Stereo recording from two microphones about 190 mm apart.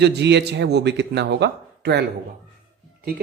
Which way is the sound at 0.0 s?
65° right (ahead or behind).